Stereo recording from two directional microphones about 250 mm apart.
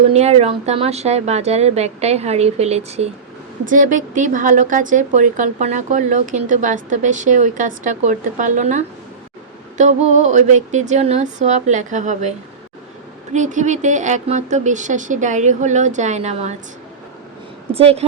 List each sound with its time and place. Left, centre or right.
0.1 s speech: right
13.3 s speech: right
17.7 s speech: right